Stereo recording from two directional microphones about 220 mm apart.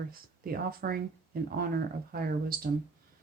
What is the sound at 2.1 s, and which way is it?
Speech, 40° right (ahead or behind).